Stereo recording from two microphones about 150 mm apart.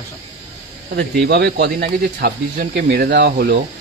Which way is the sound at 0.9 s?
90° right.